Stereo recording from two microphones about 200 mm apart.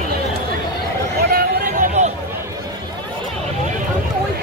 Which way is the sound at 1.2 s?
50° right (ahead or behind).